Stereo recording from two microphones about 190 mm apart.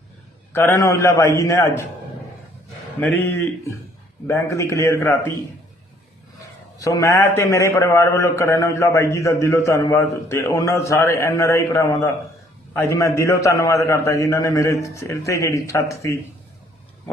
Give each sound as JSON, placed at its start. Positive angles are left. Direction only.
{"t": 0.5, "sound": "a man's voice", "side_deg": 15}
{"t": 3.0, "sound": "a man's voice", "side_deg": 10}
{"t": 6.7, "sound": "a man's voice", "side_deg": 15}